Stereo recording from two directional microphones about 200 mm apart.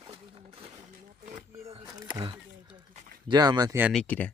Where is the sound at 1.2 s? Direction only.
30° right (ahead or behind).